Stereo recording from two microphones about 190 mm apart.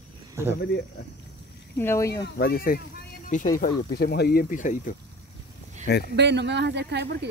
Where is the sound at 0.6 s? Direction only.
65° left (ahead or behind).